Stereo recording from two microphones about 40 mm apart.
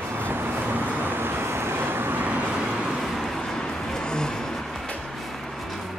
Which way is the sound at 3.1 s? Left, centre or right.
Centre.